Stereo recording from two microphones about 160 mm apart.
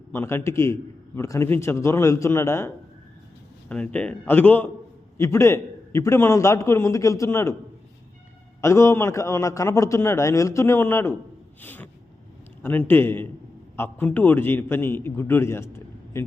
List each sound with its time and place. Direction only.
0.1 s a man's voice: 15° left (ahead or behind)
8.6 s a man's voice: 15° left (ahead or behind)